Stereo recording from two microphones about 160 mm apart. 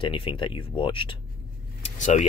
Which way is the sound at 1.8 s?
45° left (ahead or behind).